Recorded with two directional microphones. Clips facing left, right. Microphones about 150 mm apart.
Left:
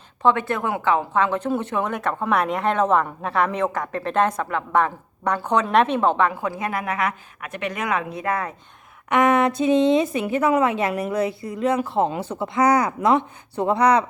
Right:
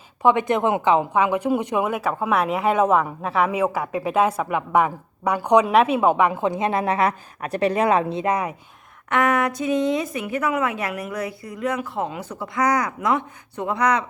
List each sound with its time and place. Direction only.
0.2 s a woman's voice: 15° right (ahead or behind)
9.0 s a woman's voice: 20° left (ahead or behind)